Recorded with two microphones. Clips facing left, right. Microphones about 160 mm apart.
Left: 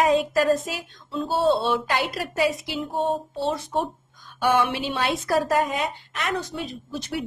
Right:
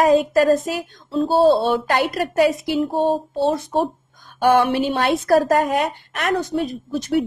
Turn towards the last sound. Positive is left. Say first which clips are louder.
# right 9 dB
turn(degrees=-50)  # may be behind; listen again after turning